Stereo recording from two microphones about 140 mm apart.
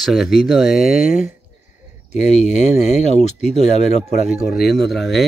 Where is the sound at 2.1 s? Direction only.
55° left (ahead or behind).